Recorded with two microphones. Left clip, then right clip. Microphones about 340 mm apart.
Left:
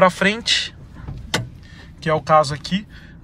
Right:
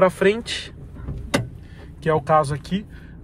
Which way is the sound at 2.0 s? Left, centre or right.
Centre.